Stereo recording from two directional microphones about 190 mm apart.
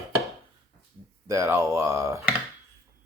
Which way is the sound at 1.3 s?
15° right (ahead or behind).